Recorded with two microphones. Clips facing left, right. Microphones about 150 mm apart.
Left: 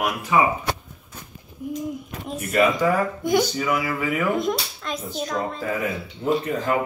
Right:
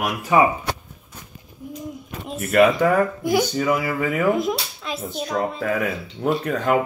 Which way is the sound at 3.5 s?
45° right (ahead or behind).